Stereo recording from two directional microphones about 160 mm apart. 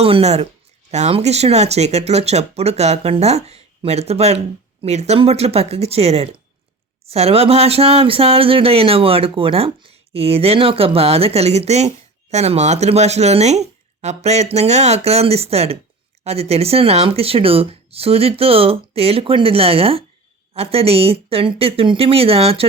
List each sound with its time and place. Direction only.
0.0 s speech: 40° right (ahead or behind)